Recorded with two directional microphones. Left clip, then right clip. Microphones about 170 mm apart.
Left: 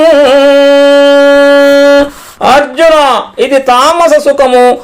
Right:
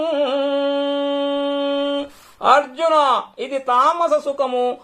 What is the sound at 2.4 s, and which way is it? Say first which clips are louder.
Speech: left 10 dB; 15° left (ahead or behind).